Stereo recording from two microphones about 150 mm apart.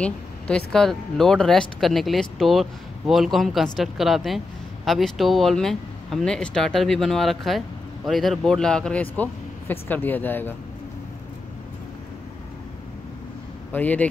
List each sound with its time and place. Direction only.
0.0 s speech: 5° left (ahead or behind)
13.7 s speech: 10° left (ahead or behind)